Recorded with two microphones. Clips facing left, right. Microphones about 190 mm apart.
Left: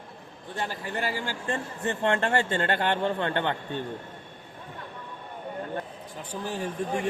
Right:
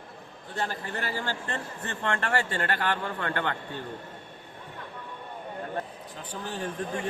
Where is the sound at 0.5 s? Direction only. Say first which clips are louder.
Left 1 dB; 15° left (ahead or behind).